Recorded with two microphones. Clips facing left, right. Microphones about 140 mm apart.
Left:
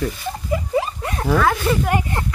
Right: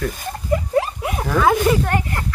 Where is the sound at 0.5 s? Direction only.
5° left (ahead or behind).